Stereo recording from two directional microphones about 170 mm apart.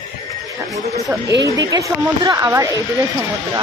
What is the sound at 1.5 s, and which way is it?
Speech, 20° right (ahead or behind).